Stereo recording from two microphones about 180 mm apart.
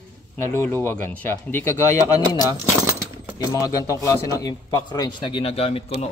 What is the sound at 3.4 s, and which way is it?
A man's voice, 20° left (ahead or behind).